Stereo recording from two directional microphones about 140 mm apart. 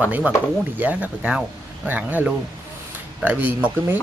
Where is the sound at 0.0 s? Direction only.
10° right (ahead or behind).